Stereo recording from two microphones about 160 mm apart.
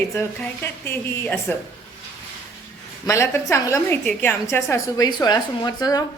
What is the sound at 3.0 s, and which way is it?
A woman's voice, 20° left (ahead or behind).